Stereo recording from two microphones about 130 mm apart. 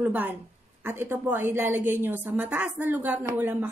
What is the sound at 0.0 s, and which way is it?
Speech, 15° right (ahead or behind).